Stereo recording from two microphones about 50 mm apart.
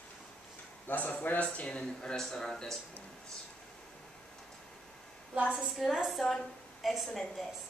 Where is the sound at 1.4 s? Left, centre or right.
Left.